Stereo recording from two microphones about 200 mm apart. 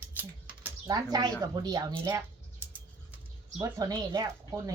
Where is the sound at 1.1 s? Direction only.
20° right (ahead or behind).